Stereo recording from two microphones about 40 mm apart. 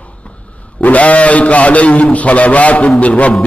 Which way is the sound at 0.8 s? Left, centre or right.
Left.